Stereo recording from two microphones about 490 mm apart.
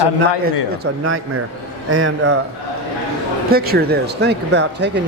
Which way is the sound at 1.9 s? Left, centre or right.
Right.